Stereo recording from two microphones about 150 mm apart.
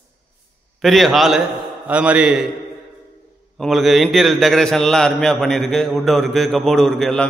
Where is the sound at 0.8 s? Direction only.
Centre (ahead or behind).